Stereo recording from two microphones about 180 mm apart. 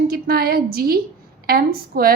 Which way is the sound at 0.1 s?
55° right (ahead or behind).